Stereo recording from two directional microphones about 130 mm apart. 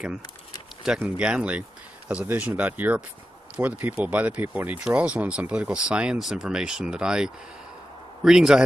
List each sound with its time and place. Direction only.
0.8 s a man's voice: 5° right (ahead or behind)